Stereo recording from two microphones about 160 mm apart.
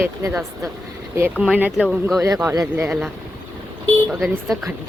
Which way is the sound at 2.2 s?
20° right (ahead or behind).